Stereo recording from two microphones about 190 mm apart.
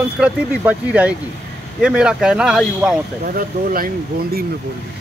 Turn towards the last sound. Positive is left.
turn(degrees=-50)  # may be behind; listen again after turning